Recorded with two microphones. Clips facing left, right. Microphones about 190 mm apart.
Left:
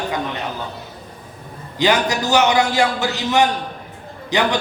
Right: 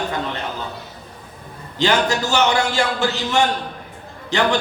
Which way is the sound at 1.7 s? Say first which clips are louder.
Left 1 dB; 15° left (ahead or behind).